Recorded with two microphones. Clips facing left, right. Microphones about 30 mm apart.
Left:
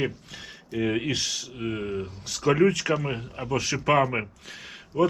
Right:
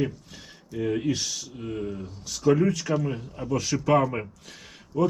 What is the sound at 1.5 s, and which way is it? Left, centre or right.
Speech, left.